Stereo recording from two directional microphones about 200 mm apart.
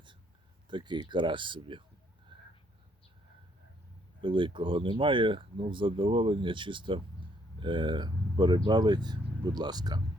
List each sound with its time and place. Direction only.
0.7 s speech: 20° right (ahead or behind)
2.3 s a sound: 25° right (ahead or behind)
4.2 s speech: 25° right (ahead or behind)